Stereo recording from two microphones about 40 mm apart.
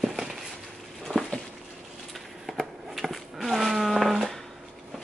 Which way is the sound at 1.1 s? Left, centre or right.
Left.